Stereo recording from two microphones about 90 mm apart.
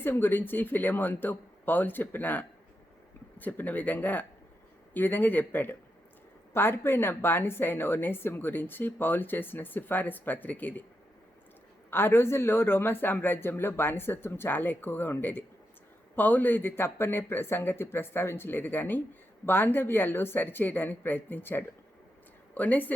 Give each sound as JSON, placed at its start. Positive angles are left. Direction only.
{"t": 0.0, "sound": "speech", "side_deg": 25}
{"t": 11.9, "sound": "speech", "side_deg": 25}